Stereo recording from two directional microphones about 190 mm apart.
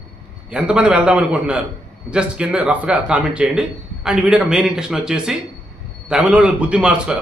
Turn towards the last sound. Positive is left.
turn(degrees=-5)  # may be behind; listen again after turning